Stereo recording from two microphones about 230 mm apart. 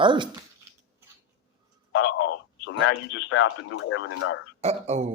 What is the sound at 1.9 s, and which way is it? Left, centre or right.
Speech, left.